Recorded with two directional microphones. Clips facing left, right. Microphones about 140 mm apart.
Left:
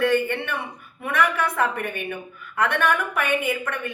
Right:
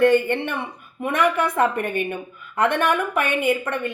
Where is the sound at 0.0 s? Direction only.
15° right (ahead or behind).